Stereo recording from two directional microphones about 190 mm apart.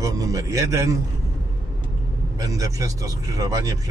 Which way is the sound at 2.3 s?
20° right (ahead or behind).